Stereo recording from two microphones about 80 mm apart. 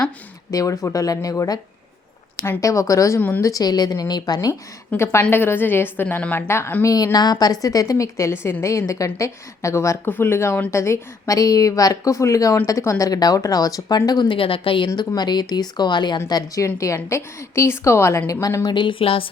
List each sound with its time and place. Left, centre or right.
0.5 s speech: left
2.6 s speech: left
3.2 s a woman's voice: left
3.4 s speech: left
4.9 s a woman's voice: centre
5.3 s a woman's voice: left
6.5 s a woman's voice: left
6.8 s a woman's voice: left
10.1 s a woman's voice: left
14.3 s speech: left
14.9 s speech: left
16.6 s a woman's voice: left
18.6 s speech: left